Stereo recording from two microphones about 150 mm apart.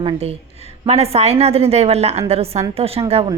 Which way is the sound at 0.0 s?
40° right (ahead or behind).